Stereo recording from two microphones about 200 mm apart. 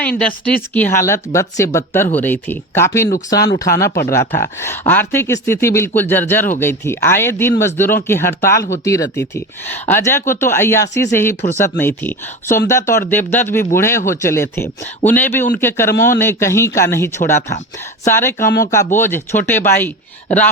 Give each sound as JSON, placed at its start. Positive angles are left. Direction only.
{"t": 0.2, "sound": "speech", "side_deg": 5}
{"t": 18.4, "sound": "speech", "side_deg": 45}
{"t": 18.9, "sound": "speech", "side_deg": 10}